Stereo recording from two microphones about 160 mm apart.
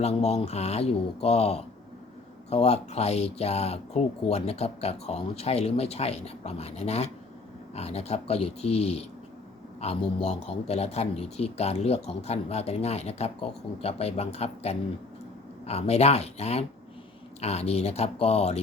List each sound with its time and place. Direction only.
0.0 s speech: 40° left (ahead or behind)